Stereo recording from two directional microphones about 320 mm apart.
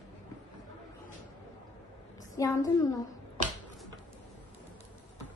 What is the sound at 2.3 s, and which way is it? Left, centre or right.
Speech, centre.